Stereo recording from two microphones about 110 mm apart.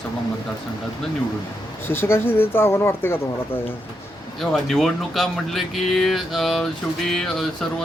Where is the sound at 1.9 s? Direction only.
20° left (ahead or behind).